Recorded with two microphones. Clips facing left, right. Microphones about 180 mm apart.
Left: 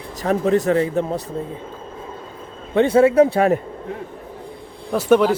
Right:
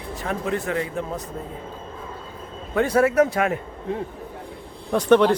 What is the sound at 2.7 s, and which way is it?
Speech, 25° left (ahead or behind).